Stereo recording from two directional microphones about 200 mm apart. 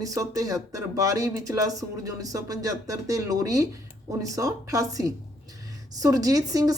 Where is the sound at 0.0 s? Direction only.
15° right (ahead or behind).